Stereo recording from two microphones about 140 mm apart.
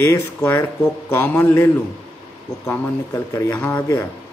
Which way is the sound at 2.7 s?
15° left (ahead or behind).